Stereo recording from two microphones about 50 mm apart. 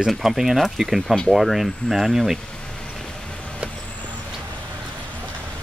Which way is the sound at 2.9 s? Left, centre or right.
Centre.